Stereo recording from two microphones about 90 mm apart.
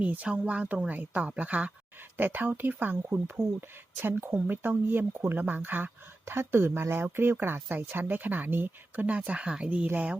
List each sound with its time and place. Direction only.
0.0 s a woman's voice: 15° right (ahead or behind)